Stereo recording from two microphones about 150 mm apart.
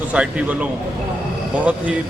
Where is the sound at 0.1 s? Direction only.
10° right (ahead or behind).